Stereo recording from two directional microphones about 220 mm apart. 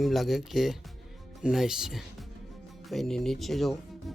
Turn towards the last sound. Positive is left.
turn(degrees=0)  # may be behind; listen again after turning